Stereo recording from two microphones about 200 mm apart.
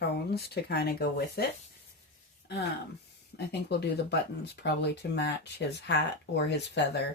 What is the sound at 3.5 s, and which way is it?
Speech, 55° left (ahead or behind).